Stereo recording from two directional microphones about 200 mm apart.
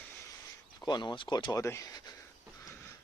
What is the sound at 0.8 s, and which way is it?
Speech, 20° left (ahead or behind).